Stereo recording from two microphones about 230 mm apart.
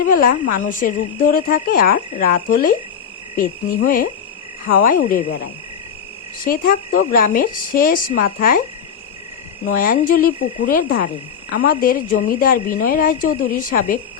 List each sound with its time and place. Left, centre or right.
0.0 s a woman's voice: left
6.4 s a woman's voice: left
9.7 s a woman's voice: left